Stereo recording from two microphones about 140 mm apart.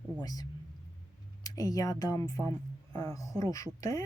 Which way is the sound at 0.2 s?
25° left (ahead or behind).